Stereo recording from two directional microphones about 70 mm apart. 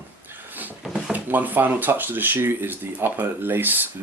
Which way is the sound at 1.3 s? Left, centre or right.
Right.